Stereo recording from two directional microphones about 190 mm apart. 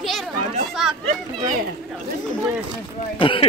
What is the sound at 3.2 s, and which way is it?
Speech, 25° left (ahead or behind).